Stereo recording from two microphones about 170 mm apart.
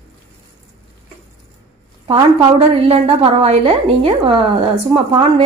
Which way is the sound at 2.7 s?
35° right (ahead or behind).